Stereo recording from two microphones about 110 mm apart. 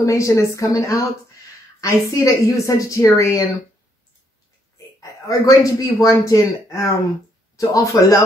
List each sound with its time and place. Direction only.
0.0 s speech: 30° left (ahead or behind)
5.0 s a man's voice: 30° left (ahead or behind)